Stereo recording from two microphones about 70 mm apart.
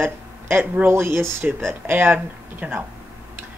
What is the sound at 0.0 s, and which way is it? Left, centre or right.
Speech, right.